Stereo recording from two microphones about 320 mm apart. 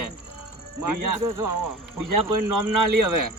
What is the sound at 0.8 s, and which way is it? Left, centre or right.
Speech, right.